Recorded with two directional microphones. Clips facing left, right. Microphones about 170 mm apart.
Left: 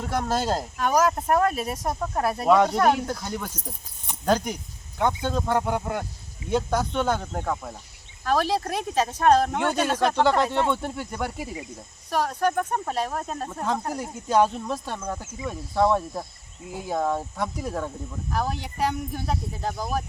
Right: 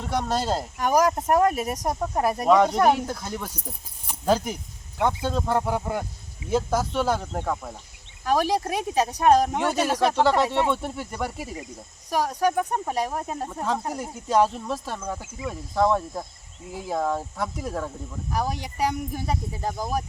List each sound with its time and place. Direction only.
0.0 s speech: centre (ahead or behind)
0.8 s speech: 15° right (ahead or behind)
2.5 s speech: centre (ahead or behind)
12.1 s speech: 10° right (ahead or behind)
18.3 s speech: 10° right (ahead or behind)